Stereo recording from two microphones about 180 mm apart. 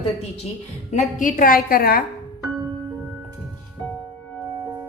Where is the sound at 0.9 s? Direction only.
45° left (ahead or behind).